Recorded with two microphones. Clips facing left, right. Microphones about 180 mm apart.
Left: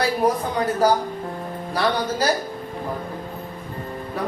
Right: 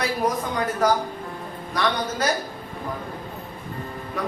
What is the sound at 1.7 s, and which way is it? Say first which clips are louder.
Speech: left 2 dB; 35° left (ahead or behind).